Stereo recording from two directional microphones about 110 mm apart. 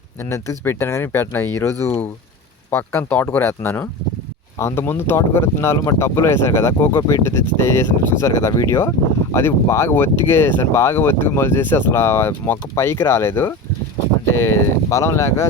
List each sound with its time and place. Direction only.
0.3 s speech: 25° left (ahead or behind)